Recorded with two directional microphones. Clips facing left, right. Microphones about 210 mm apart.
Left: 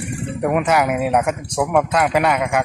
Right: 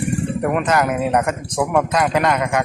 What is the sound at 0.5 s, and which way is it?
A man's voice, 10° left (ahead or behind).